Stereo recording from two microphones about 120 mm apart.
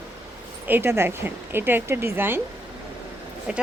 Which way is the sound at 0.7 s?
20° right (ahead or behind).